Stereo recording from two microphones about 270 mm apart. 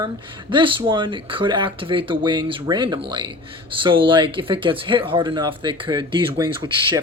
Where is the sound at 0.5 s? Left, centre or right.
Centre.